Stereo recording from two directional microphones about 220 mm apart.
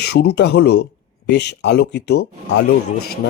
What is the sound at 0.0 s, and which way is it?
A man's voice, 45° left (ahead or behind).